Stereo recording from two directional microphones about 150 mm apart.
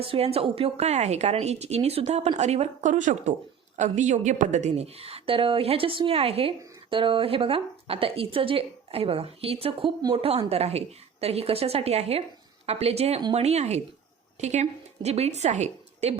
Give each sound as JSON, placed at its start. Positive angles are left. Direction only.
{"t": 0.0, "sound": "a woman's voice", "side_deg": -40}